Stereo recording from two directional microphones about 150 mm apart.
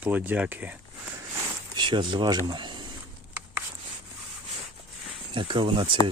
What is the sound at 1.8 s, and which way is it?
Speech, 30° right (ahead or behind).